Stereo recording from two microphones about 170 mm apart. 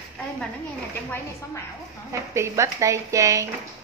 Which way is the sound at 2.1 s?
15° right (ahead or behind).